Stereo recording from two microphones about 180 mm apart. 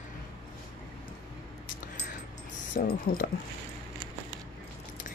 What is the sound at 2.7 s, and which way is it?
Speech, 55° left (ahead or behind).